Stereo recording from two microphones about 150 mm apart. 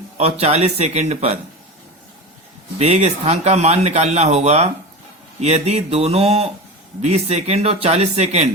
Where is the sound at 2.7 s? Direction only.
45° right (ahead or behind).